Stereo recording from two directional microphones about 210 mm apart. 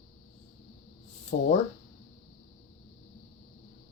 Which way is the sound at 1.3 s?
45° left (ahead or behind).